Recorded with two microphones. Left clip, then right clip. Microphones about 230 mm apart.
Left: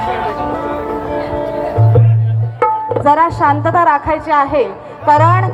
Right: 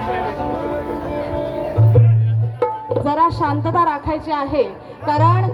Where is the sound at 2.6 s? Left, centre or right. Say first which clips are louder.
Left 6 dB; centre.